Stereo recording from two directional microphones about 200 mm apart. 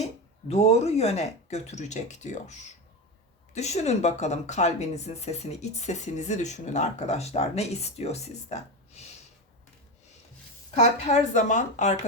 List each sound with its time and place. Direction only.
0.4 s speech: 30° left (ahead or behind)
10.8 s speech: 35° left (ahead or behind)